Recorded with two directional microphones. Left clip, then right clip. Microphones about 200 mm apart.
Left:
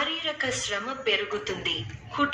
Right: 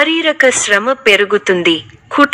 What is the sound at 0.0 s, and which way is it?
A woman's voice, 50° right (ahead or behind).